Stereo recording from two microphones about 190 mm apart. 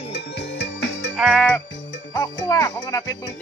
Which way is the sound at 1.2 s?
5° left (ahead or behind).